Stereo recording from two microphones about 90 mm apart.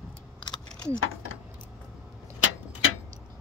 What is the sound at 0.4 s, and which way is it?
Keys jangling, 55° left (ahead or behind).